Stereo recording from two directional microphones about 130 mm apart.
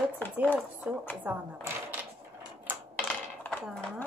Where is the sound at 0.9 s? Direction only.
10° right (ahead or behind).